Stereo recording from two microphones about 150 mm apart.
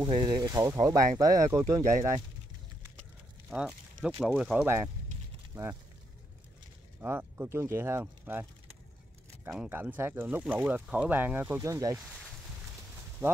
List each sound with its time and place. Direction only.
0.0 s speech: 30° right (ahead or behind)
3.4 s a sound: 5° right (ahead or behind)
4.2 s speech: 5° right (ahead or behind)
4.6 s speech: 20° right (ahead or behind)
7.0 s speech: 10° right (ahead or behind)
9.5 s speech: 10° right (ahead or behind)
13.2 s speech: 20° right (ahead or behind)